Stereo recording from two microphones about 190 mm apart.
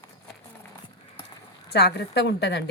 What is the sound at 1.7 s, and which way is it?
Speech, 60° left (ahead or behind).